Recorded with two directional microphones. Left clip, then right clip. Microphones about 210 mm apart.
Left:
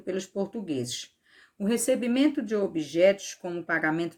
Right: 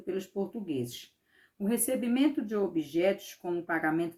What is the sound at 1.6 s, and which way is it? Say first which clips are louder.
Speech: left 5 dB; 40° left (ahead or behind).